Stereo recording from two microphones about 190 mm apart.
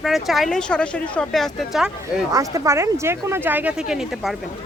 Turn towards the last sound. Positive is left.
turn(degrees=0)  # may be behind; listen again after turning